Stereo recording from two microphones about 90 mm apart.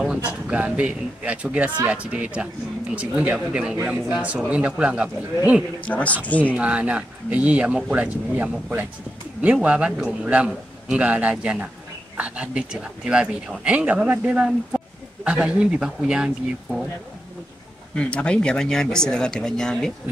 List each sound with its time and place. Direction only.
0.3 s speech: 15° right (ahead or behind)
5.8 s speech: 15° left (ahead or behind)
6.4 s speech: 15° right (ahead or behind)
17.9 s speech: 10° left (ahead or behind)